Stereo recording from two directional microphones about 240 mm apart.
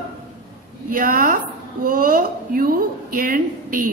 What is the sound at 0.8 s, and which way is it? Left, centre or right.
A woman's voice, right.